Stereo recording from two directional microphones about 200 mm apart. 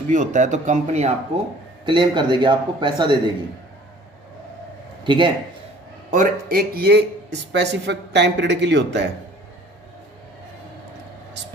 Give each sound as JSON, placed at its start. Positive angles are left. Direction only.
{"t": 0.1, "sound": "speech", "side_deg": -40}
{"t": 1.8, "sound": "a man's voice", "side_deg": -25}
{"t": 5.0, "sound": "a man's voice", "side_deg": -25}
{"t": 6.1, "sound": "speech", "side_deg": -45}